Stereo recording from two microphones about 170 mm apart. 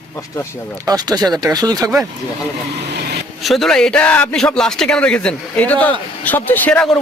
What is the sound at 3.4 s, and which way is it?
A man's voice, centre (ahead or behind).